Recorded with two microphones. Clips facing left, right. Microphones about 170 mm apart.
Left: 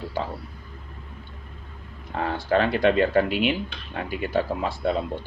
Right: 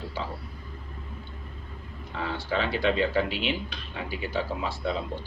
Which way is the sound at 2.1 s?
55° left (ahead or behind).